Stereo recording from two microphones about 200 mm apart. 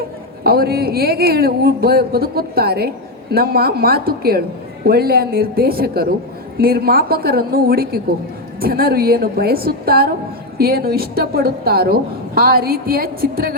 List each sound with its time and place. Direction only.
0.4 s a woman's voice: 50° right (ahead or behind)